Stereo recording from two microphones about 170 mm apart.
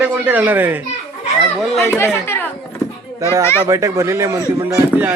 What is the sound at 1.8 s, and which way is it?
Speech, 15° left (ahead or behind).